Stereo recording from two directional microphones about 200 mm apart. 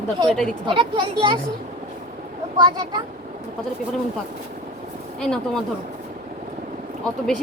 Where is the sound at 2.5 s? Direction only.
20° right (ahead or behind).